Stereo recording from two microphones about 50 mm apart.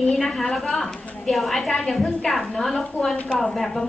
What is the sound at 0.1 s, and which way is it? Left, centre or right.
A woman's voice, centre.